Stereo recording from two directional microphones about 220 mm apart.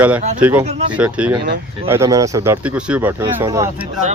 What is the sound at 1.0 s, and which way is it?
Speech, 5° right (ahead or behind).